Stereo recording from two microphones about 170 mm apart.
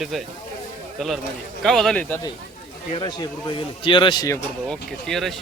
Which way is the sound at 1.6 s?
Centre (ahead or behind).